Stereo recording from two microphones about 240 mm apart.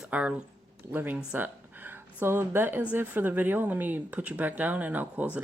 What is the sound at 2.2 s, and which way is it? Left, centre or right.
Speech, centre.